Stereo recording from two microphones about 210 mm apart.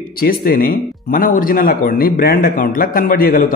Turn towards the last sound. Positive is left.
turn(degrees=40)  # may be behind; listen again after turning